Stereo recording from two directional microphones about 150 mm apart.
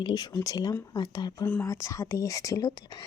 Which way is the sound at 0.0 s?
25° left (ahead or behind).